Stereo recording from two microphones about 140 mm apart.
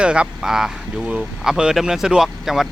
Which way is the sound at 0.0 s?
5° right (ahead or behind).